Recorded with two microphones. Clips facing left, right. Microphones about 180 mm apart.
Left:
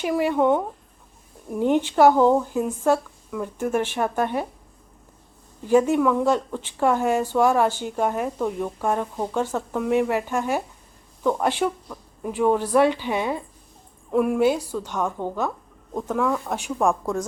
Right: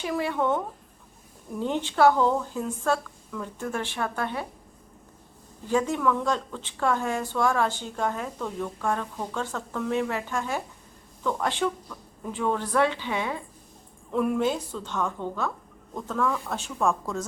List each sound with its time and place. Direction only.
0.0 s speech: 15° left (ahead or behind)
5.6 s speech: 15° left (ahead or behind)